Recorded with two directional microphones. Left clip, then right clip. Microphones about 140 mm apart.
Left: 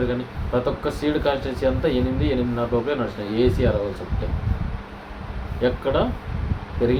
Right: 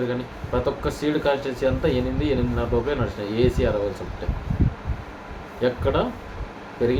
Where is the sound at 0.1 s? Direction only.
5° right (ahead or behind).